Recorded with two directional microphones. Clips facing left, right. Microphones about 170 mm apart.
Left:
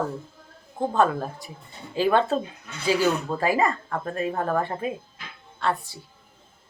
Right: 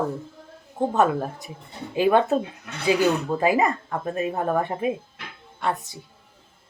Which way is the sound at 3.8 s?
5° right (ahead or behind).